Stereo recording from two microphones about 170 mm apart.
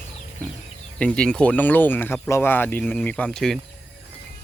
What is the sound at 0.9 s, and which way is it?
Speech, 5° left (ahead or behind).